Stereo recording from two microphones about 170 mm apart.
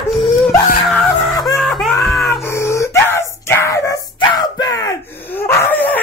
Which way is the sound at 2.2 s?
15° left (ahead or behind).